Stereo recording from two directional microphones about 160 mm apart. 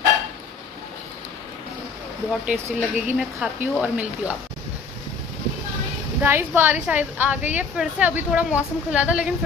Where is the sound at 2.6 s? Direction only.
15° right (ahead or behind).